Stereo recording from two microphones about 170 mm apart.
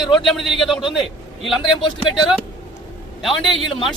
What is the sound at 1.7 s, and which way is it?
Speech, 30° left (ahead or behind).